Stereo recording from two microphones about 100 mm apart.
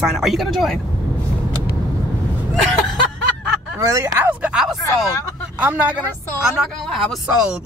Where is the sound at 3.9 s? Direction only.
25° right (ahead or behind).